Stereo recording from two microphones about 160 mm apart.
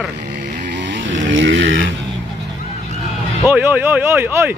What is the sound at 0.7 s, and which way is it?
Vehicle, 90° right.